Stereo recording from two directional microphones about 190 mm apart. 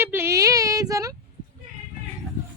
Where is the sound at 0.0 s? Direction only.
10° right (ahead or behind).